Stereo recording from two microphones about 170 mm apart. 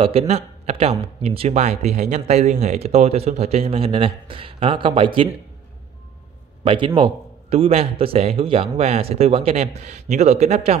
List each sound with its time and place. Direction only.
0.0 s speech: 35° right (ahead or behind)
6.6 s a man's voice: 30° right (ahead or behind)